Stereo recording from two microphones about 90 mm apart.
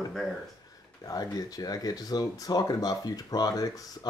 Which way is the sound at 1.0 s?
45° left (ahead or behind).